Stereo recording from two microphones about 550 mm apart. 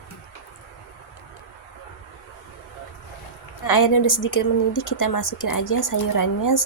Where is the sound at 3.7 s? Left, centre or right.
Left.